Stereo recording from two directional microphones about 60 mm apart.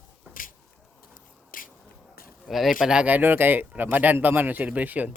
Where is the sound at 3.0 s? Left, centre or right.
Right.